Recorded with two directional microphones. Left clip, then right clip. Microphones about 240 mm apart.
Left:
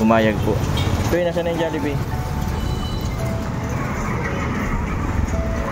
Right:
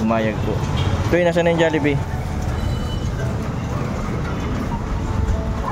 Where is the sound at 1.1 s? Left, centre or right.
Centre.